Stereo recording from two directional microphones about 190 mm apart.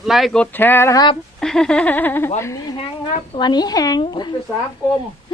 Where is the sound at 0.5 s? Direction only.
10° left (ahead or behind).